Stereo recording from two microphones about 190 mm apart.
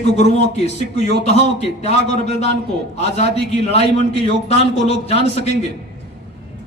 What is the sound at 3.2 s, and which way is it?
Speech, 60° right (ahead or behind).